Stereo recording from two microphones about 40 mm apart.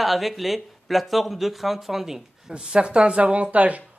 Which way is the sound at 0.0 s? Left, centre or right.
Centre.